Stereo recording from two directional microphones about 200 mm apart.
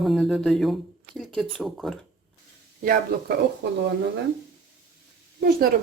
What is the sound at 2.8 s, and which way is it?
Speech, 55° right (ahead or behind).